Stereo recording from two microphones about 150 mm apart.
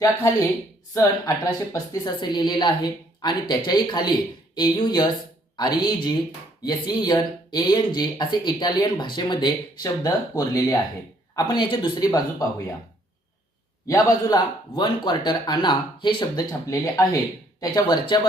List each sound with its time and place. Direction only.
0.9 s speech: 25° left (ahead or behind)
13.8 s speech: 25° left (ahead or behind)